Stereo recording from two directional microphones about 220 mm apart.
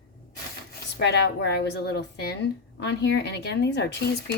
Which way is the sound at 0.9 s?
50° left (ahead or behind).